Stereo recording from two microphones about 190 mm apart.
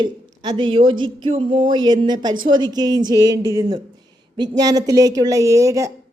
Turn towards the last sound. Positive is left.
turn(degrees=-15)  # may be behind; listen again after turning